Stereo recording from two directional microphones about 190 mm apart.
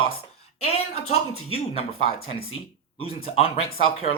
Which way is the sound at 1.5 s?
30° left (ahead or behind).